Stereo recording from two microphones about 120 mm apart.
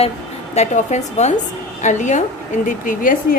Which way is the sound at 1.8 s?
90° left.